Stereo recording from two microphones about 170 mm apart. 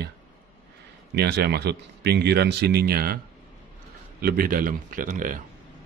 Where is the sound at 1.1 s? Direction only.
75° right (ahead or behind).